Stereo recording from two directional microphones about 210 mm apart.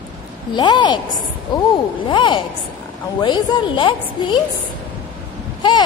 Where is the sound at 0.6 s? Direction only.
20° left (ahead or behind).